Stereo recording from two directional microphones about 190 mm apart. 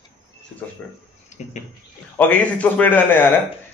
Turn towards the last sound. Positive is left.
turn(degrees=10)  # may be behind; listen again after turning